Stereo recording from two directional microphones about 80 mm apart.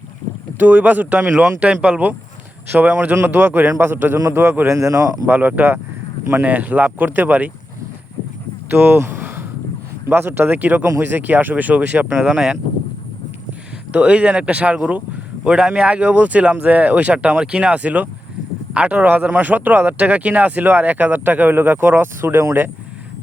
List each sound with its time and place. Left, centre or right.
0.6 s speech: right
5.2 s speech: right
8.7 s a sound: right
10.1 s speech: right; by 12.5 s centre
13.9 s speech: centre; by 22.7 s right